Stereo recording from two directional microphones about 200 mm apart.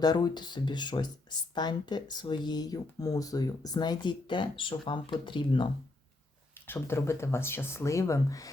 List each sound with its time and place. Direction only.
0.0 s speech: 20° left (ahead or behind)
6.7 s speech: 10° left (ahead or behind)